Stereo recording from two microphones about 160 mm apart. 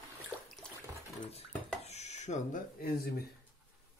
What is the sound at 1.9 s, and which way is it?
Dishes, 45° left (ahead or behind).